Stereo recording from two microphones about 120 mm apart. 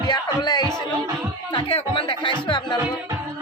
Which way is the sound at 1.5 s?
50° left (ahead or behind).